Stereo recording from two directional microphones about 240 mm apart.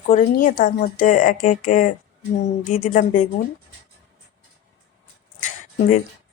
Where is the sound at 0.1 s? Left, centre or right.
Left.